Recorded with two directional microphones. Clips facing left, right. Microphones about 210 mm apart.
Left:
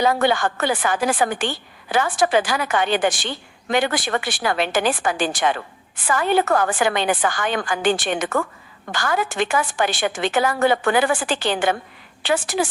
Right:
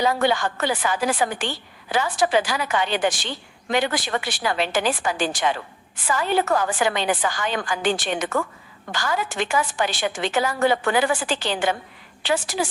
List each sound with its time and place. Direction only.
0.0 s a woman's voice: 55° left (ahead or behind)